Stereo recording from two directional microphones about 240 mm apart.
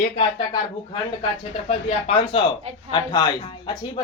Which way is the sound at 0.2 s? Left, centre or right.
Centre.